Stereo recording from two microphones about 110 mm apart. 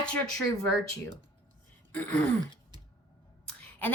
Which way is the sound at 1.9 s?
10° left (ahead or behind).